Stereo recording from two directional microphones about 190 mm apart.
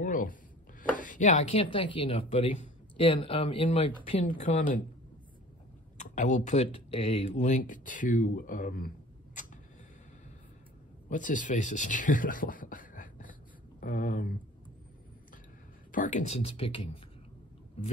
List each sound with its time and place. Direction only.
0.0 s chopping: 45° left (ahead or behind)
1.5 s speech: 30° left (ahead or behind)
4.6 s speech: 45° left (ahead or behind)
5.9 s speech: 40° left (ahead or behind)
11.1 s speech: 45° left (ahead or behind)
15.9 s speech: 40° left (ahead or behind)